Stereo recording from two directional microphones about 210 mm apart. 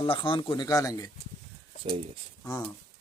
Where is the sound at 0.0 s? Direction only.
25° left (ahead or behind).